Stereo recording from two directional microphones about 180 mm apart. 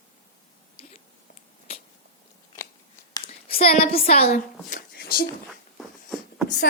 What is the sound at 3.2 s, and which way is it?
A woman's voice, 35° left (ahead or behind).